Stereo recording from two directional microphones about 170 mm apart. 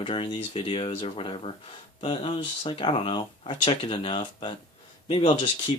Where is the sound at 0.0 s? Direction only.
30° left (ahead or behind).